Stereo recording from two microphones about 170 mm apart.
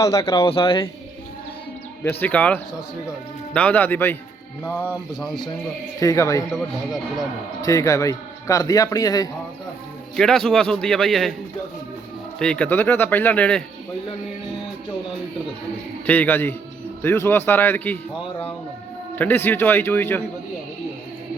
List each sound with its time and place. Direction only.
0.0 s a man's voice: 20° left (ahead or behind)
2.0 s speech: 10° left (ahead or behind)
6.0 s a man's voice: 20° left (ahead or behind)
6.5 s a man's voice: centre (ahead or behind)
7.6 s a man's voice: 20° left (ahead or behind)
10.2 s a man's voice: 5° left (ahead or behind)
12.4 s speech: 5° left (ahead or behind)
16.0 s speech: 10° left (ahead or behind)
19.1 s speech: 10° left (ahead or behind)